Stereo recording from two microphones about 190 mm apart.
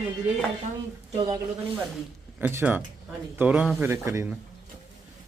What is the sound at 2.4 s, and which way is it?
A man's voice, 10° right (ahead or behind).